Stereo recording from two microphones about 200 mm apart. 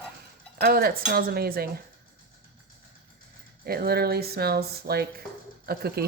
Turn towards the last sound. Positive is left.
turn(degrees=-50)  # may be behind; listen again after turning